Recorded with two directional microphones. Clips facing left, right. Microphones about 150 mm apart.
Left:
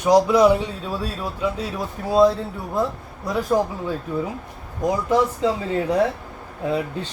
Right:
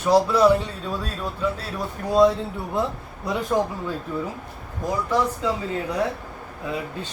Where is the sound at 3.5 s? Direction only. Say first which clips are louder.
Left 2 dB; centre (ahead or behind).